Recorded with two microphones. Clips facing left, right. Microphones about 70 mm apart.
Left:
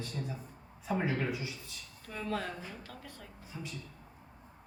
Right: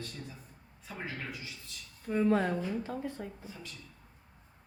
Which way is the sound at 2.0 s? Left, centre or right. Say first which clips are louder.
Right 9 dB; right.